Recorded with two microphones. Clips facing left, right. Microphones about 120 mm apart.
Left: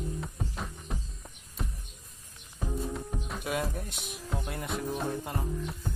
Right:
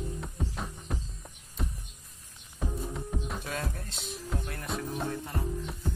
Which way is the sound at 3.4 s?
15° left (ahead or behind).